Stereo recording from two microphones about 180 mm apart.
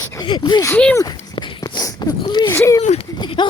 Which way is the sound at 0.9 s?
20° left (ahead or behind).